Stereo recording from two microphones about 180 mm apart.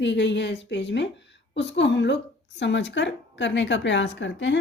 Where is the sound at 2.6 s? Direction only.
90° left.